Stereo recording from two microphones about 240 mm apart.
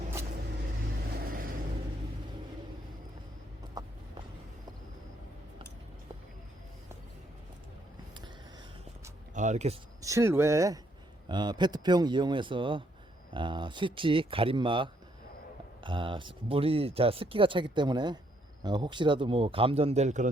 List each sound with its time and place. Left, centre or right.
1.2 s vehicle: right
3.8 s a sound: centre
9.3 s speech: right
10.0 s a man's voice: centre; by 20.3 s right